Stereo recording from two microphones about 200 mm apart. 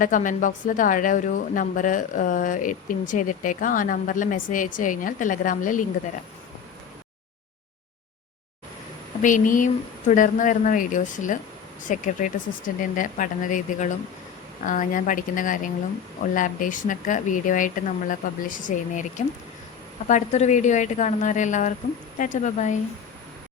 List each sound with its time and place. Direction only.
0.0 s a woman's voice: 40° left (ahead or behind)
9.2 s a woman's voice: 40° left (ahead or behind)
20.1 s a woman's voice: 35° left (ahead or behind)